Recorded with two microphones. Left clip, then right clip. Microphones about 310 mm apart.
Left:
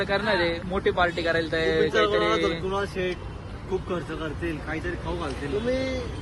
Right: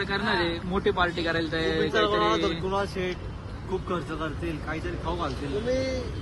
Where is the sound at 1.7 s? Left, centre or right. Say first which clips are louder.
Left 2 dB; centre.